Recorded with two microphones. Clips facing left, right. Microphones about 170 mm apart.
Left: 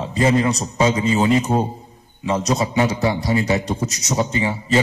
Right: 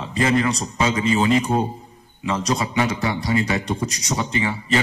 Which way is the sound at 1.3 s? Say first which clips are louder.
Left 1 dB; 20° left (ahead or behind).